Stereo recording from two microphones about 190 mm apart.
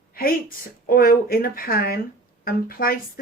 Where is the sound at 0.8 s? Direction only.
50° left (ahead or behind).